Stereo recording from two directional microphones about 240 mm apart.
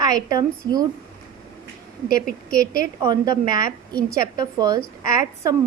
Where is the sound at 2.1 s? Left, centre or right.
Left.